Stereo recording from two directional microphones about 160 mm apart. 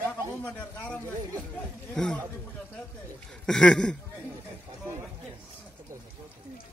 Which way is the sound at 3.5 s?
5° left (ahead or behind).